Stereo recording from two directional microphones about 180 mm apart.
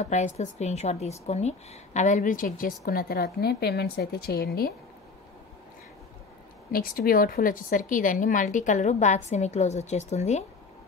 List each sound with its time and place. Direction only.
0.0 s a woman's voice: 40° left (ahead or behind); by 4.7 s 60° left (ahead or behind)
6.7 s a woman's voice: 55° left (ahead or behind); by 10.4 s 40° left (ahead or behind)